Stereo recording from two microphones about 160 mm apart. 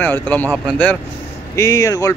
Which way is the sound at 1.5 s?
20° left (ahead or behind).